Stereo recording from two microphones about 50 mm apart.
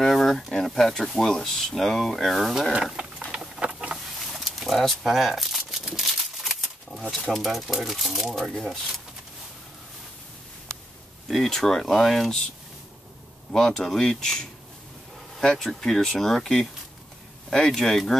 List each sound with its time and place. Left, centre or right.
0.0 s a sound: centre
0.5 s speech: centre
3.6 s vehicle: right
4.3 s crumpling: centre
5.8 s a sound: centre
7.3 s speech: centre
11.2 s speech: centre
13.5 s speech: centre